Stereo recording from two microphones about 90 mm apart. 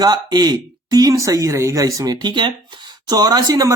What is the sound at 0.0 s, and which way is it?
Speech, 50° right (ahead or behind).